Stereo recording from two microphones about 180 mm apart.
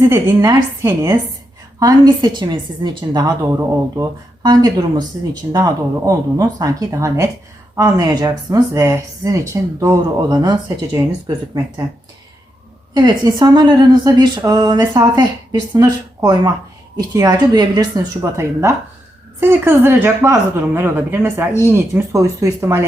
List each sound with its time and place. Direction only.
0.0 s speech: 15° right (ahead or behind)
6.1 s speech: 20° right (ahead or behind)
12.9 s speech: 25° right (ahead or behind)